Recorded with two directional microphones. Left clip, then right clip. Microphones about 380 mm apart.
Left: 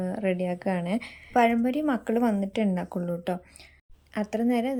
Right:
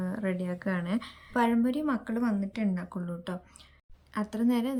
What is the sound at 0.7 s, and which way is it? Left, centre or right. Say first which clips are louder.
Speech: left 2 dB; centre.